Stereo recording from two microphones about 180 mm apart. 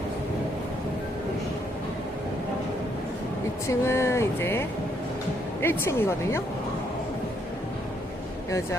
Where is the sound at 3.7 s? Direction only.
15° left (ahead or behind).